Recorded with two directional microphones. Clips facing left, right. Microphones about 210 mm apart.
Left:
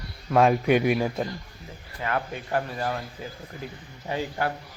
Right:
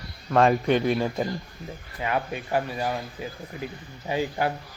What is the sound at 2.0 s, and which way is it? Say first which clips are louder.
Speech: right 1 dB; 15° right (ahead or behind).